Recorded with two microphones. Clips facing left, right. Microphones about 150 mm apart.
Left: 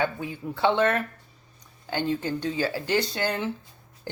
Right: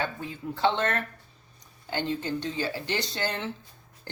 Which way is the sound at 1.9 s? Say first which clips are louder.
Left 3 dB; 15° left (ahead or behind).